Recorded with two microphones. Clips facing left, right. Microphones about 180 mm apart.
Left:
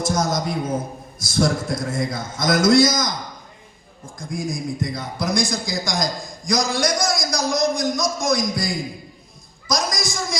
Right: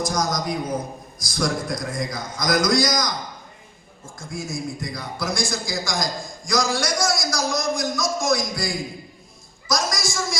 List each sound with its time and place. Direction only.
0.0 s a man's voice: 25° left (ahead or behind)
4.0 s a man's voice: 15° left (ahead or behind)
9.6 s a sound: 20° left (ahead or behind)